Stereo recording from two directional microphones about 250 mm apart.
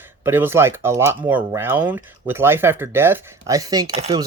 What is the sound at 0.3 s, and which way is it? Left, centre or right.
Speech, centre.